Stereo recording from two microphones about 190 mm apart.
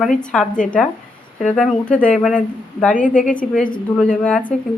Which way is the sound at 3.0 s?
45° left (ahead or behind).